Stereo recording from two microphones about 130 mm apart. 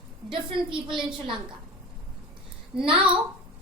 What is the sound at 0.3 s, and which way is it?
Speech, 40° right (ahead or behind).